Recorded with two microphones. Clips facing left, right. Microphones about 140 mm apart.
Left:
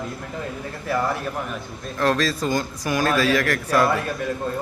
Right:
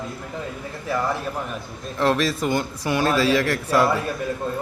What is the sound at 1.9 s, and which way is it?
Speech, 20° right (ahead or behind).